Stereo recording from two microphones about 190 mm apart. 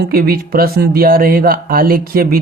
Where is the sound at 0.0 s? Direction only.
50° right (ahead or behind).